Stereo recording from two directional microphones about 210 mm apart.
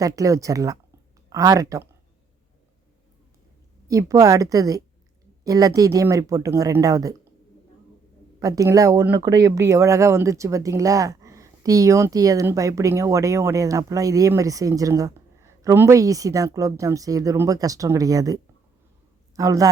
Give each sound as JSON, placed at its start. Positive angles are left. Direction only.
{"t": 0.0, "sound": "speech", "side_deg": -15}
{"t": 3.8, "sound": "speech", "side_deg": -15}
{"t": 8.4, "sound": "speech", "side_deg": -15}
{"t": 19.4, "sound": "speech", "side_deg": -15}